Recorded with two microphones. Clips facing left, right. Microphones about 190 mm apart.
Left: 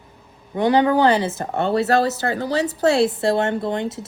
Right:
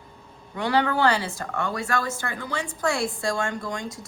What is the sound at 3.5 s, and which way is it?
Speech, 60° left (ahead or behind).